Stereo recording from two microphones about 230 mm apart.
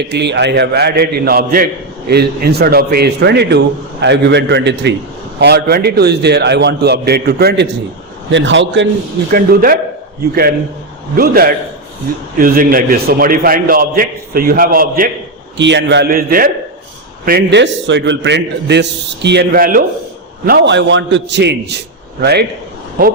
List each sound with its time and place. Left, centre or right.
0.0 s a man's voice: right
9.3 s a man's voice: right
11.2 s a man's voice: right
15.5 s a man's voice: right